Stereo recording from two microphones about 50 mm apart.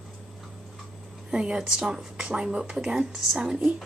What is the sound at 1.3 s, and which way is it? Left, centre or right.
Speech, centre.